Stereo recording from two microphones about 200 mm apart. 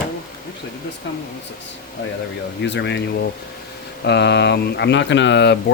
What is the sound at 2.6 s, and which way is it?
Speech, 60° left (ahead or behind).